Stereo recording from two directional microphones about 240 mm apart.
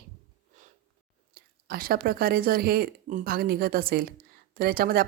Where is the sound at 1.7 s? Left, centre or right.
Right.